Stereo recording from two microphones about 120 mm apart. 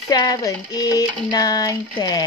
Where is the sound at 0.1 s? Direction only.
35° left (ahead or behind).